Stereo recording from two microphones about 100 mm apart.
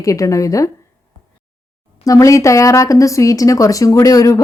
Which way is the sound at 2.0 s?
35° left (ahead or behind).